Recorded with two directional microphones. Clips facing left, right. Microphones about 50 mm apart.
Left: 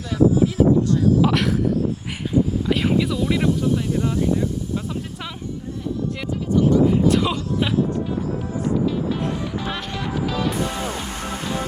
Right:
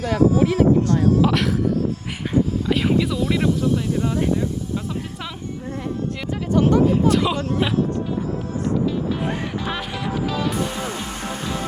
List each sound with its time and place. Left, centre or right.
0.0 s speech: right
1.2 s speech: centre
2.6 s speech: centre
6.5 s speech: right
7.1 s speech: centre
7.3 s speech: right
9.6 s music: centre